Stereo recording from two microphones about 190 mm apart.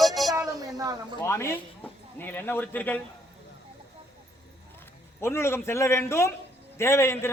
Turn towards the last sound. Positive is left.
turn(degrees=15)  # may be behind; listen again after turning